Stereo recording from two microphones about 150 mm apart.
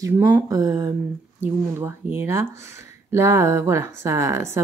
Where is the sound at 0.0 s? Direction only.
20° right (ahead or behind).